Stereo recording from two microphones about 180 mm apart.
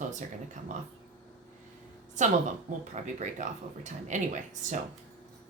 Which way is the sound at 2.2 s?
45° right (ahead or behind).